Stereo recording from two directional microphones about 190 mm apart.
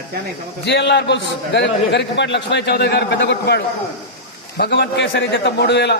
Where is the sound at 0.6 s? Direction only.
65° left (ahead or behind).